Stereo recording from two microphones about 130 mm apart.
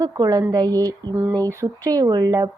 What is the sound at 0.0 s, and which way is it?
Speech, 30° right (ahead or behind).